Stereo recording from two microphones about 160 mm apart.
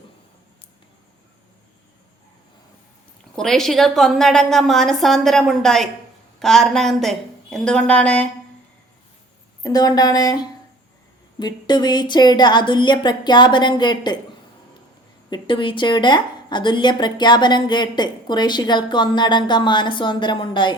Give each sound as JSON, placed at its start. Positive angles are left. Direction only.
{"t": 3.3, "sound": "a woman's voice", "side_deg": 5}
{"t": 9.6, "sound": "a woman's voice", "side_deg": 25}
{"t": 15.3, "sound": "a woman's voice", "side_deg": 30}